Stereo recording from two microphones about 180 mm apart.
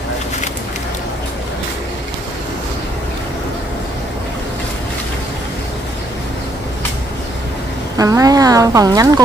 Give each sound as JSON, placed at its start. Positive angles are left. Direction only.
{"t": 8.0, "sound": "speech", "side_deg": -20}